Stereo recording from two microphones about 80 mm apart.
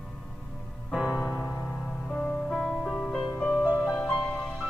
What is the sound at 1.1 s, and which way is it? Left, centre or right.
Music, left.